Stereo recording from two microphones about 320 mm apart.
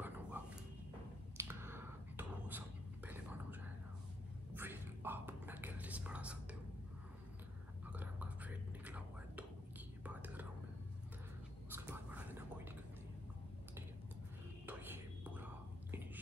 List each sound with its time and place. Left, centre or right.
0.3 s a sound: centre
3.1 s whispering: centre
4.6 s whispering: centre
7.8 s whispering: centre
11.7 s whispering: centre
14.7 s whispering: centre